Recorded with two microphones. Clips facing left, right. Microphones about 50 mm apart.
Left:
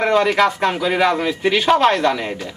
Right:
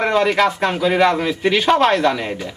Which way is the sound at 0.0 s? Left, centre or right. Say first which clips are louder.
Left 1 dB; centre.